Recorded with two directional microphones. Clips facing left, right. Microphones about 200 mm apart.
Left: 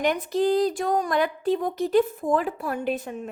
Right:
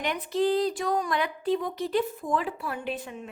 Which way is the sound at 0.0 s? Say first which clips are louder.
Left 4 dB; 45° left (ahead or behind).